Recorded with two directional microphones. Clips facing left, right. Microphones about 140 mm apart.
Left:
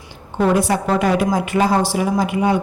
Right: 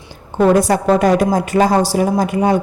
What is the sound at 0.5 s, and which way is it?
A woman's voice, 40° right (ahead or behind).